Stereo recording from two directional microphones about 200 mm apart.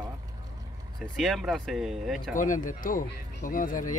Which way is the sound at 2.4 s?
40° left (ahead or behind).